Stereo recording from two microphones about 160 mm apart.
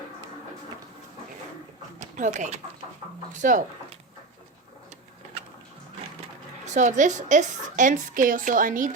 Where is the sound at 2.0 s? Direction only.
50° right (ahead or behind).